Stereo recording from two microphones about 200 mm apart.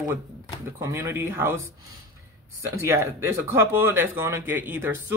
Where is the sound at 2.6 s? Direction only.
15° right (ahead or behind).